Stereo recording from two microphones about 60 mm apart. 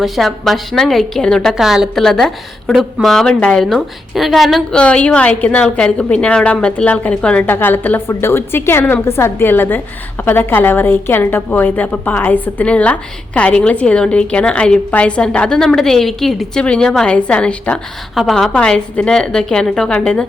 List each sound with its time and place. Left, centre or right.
0.0 s a woman's voice: centre
1.5 s a woman's voice: centre
2.0 s a woman's voice: centre
3.2 s a woman's voice: centre
3.7 s a woman's voice: centre
4.7 s a woman's voice: centre
7.4 s a woman's voice: left; by 16.5 s centre
16.6 s a woman's voice: centre
18.1 s a woman's voice: centre
18.5 s a woman's voice: centre